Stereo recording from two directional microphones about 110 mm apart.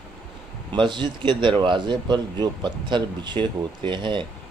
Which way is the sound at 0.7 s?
45° right (ahead or behind).